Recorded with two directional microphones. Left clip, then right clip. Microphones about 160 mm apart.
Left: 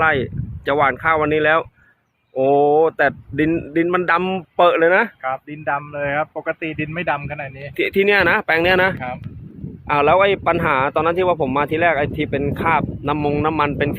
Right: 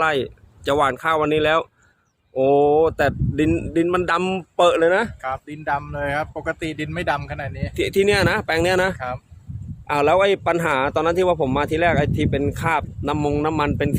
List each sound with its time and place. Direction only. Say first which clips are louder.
0.0 s speech: left 3 dB; 5° right (ahead or behind)
5.2 s speech: left 3 dB; 20° left (ahead or behind)
7.8 s speech: left 3 dB; 10° right (ahead or behind)